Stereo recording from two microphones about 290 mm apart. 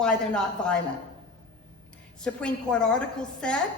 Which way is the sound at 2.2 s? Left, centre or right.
Centre.